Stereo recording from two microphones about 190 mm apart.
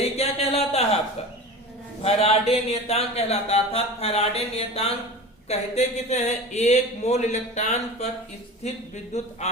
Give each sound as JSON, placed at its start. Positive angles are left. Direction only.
{"t": 0.2, "sound": "a sound", "side_deg": 35}
{"t": 2.0, "sound": "speech", "side_deg": 30}
{"t": 9.1, "sound": "speech", "side_deg": 35}